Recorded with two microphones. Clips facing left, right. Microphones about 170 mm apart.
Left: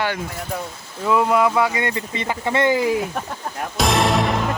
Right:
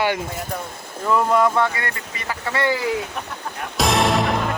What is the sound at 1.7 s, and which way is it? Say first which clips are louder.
Speech: left 6 dB; 20° left (ahead or behind).